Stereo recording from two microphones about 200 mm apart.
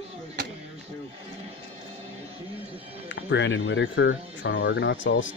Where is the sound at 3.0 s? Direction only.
65° left (ahead or behind).